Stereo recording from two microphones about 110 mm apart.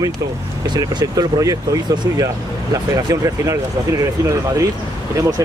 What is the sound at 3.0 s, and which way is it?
Speech, 30° right (ahead or behind).